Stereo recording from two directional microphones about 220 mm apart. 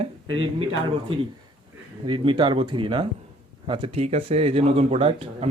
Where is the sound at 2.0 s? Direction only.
25° right (ahead or behind).